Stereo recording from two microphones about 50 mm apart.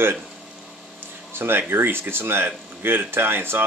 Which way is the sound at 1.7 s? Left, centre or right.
Right.